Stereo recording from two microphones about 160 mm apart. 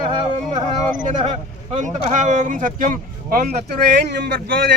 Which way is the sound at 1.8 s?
50° right (ahead or behind).